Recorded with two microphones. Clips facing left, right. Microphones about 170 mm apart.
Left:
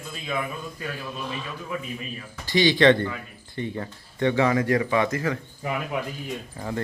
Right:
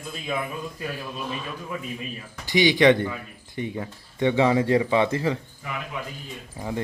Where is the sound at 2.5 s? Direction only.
15° right (ahead or behind).